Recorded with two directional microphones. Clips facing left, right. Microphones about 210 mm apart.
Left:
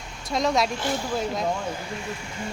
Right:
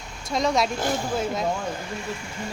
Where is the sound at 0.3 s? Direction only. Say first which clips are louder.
Even; centre (ahead or behind).